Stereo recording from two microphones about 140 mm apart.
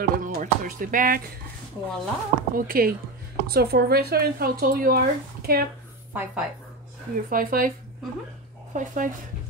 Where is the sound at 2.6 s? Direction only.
90° right.